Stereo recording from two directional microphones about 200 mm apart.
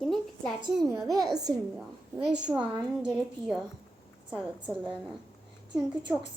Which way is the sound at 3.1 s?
5° right (ahead or behind).